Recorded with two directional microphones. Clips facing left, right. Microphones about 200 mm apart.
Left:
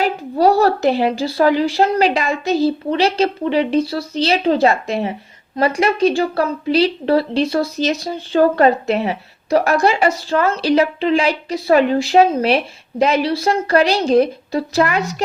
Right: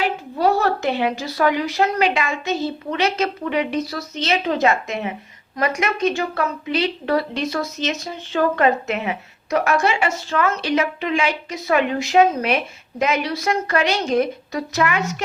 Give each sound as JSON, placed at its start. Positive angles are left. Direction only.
{"t": 0.0, "sound": "a woman's voice", "side_deg": 35}